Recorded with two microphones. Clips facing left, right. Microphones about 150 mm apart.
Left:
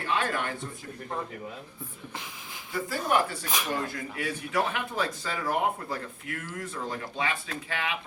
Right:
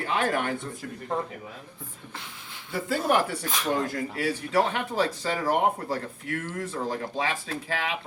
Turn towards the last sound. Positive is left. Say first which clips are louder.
# right 3 dB
turn(degrees=-35)  # may be behind; listen again after turning